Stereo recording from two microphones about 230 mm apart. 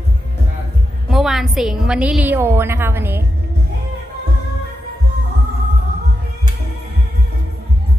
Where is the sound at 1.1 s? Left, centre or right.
Centre.